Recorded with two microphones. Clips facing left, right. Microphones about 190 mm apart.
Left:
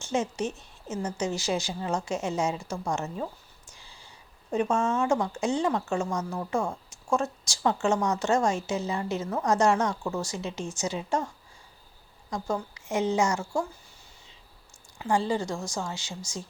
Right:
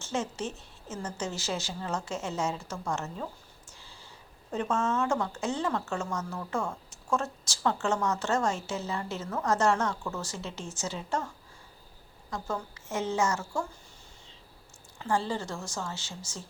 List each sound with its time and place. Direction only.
0.0 s a woman's voice: 15° left (ahead or behind)
3.8 s a sound: 15° left (ahead or behind)
4.5 s a woman's voice: 15° left (ahead or behind)
12.3 s a woman's voice: 15° left (ahead or behind)
14.9 s a woman's voice: 15° left (ahead or behind)